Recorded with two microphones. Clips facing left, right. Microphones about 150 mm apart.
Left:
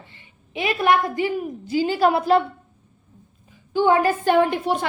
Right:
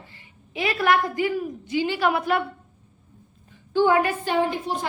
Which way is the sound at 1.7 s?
40° left (ahead or behind).